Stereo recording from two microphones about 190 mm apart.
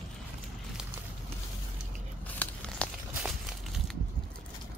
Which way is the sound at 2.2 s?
10° left (ahead or behind).